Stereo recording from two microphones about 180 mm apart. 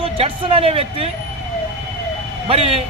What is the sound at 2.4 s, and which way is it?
Speech, 35° right (ahead or behind).